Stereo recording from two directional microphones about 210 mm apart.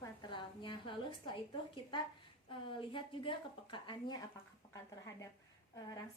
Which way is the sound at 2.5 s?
25° left (ahead or behind).